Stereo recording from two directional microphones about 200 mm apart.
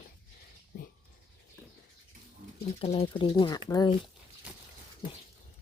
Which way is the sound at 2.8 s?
25° left (ahead or behind).